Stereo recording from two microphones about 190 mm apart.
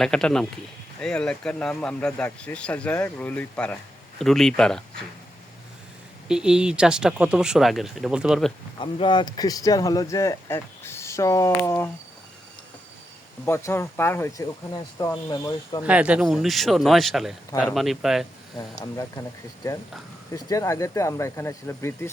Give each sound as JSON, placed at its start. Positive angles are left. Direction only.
{"t": 0.0, "sound": "speech", "side_deg": 5}
{"t": 6.2, "sound": "speech", "side_deg": -5}
{"t": 8.8, "sound": "speech", "side_deg": 25}
{"t": 13.4, "sound": "speech", "side_deg": 15}
{"t": 15.8, "sound": "speech", "side_deg": -5}
{"t": 20.3, "sound": "speech", "side_deg": 15}